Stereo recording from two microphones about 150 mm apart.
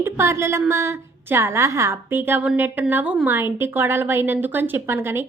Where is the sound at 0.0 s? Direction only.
20° right (ahead or behind).